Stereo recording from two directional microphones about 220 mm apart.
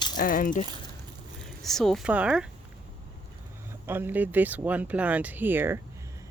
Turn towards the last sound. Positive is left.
turn(degrees=-10)  # may be behind; listen again after turning